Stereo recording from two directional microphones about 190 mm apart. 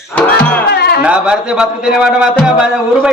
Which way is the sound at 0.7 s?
55° left (ahead or behind).